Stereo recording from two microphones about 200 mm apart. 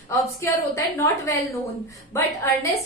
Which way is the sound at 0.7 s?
15° left (ahead or behind).